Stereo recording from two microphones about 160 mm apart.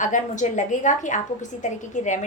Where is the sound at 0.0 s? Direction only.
50° left (ahead or behind).